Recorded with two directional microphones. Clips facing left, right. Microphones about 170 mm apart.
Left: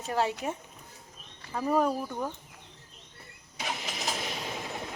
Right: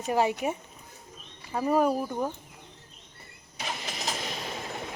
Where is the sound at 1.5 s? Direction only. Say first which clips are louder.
Right 3 dB; 10° right (ahead or behind).